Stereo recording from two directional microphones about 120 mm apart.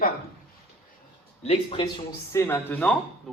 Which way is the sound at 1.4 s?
55° left (ahead or behind).